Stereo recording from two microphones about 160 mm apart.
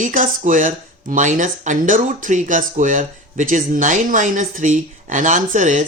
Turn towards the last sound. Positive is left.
turn(degrees=-50)  # may be behind; listen again after turning